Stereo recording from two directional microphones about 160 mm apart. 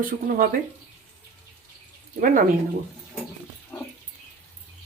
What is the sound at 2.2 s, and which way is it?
Speech, 60° right (ahead or behind).